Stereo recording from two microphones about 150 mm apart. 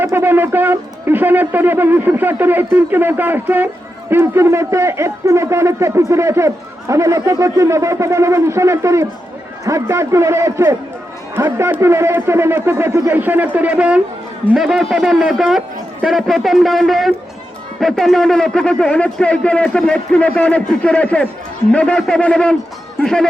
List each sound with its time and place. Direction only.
0.0 s a man's voice: 15° right (ahead or behind); by 22.5 s 5° left (ahead or behind)